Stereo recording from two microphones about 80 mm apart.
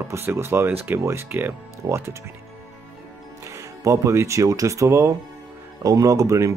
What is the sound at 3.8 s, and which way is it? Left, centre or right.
Speech, right.